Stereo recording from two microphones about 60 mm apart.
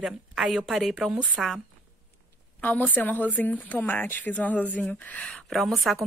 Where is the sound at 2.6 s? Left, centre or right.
Left.